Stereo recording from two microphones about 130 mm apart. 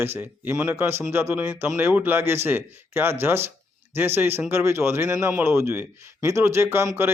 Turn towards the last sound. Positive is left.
turn(degrees=-15)  # may be behind; listen again after turning